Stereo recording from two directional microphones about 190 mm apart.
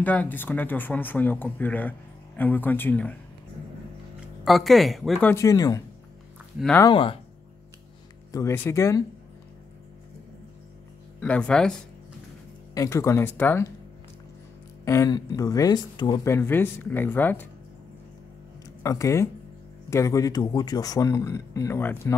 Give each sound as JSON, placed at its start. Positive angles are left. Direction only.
{"t": 0.0, "sound": "speech", "side_deg": 10}
{"t": 4.5, "sound": "speech", "side_deg": 0}
{"t": 5.3, "sound": "speech", "side_deg": 15}
{"t": 6.8, "sound": "speech", "side_deg": 25}
{"t": 8.3, "sound": "speech", "side_deg": 15}
{"t": 11.1, "sound": "speech", "side_deg": 5}
{"t": 12.7, "sound": "speech", "side_deg": 15}
{"t": 14.9, "sound": "speech", "side_deg": 20}
{"t": 18.8, "sound": "speech", "side_deg": 15}